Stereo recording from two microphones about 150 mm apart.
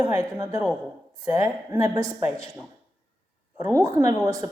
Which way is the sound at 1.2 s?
20° right (ahead or behind).